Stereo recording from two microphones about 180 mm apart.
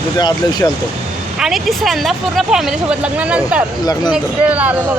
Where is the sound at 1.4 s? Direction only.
Centre (ahead or behind).